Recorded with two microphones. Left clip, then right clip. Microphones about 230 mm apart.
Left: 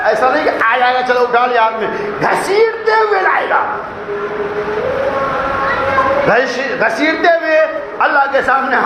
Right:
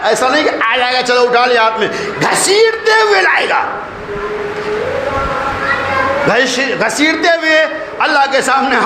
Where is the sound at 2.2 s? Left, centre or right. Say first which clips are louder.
Right 2 dB; right.